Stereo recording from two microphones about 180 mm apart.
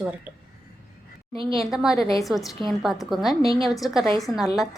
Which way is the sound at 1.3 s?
30° right (ahead or behind).